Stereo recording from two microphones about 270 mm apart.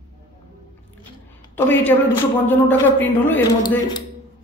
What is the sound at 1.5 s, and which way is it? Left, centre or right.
Speech, centre.